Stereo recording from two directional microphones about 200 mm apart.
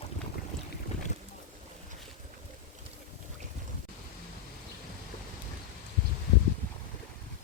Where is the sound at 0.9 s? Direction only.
35° left (ahead or behind).